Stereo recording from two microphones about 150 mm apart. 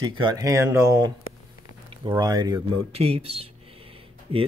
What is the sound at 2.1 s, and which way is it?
Speech, 25° right (ahead or behind).